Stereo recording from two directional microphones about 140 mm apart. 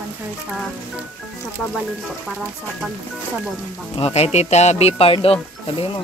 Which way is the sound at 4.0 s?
45° left (ahead or behind).